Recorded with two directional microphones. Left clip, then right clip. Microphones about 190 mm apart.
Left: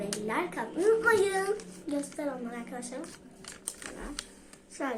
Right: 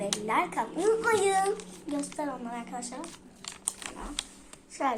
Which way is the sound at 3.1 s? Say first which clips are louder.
Right 3 dB; 15° right (ahead or behind).